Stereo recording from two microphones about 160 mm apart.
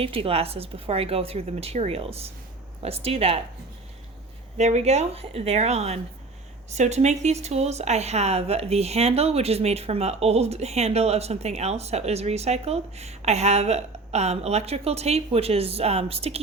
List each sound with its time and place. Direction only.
0.0 s speech: 35° right (ahead or behind)
4.5 s speech: 45° right (ahead or behind)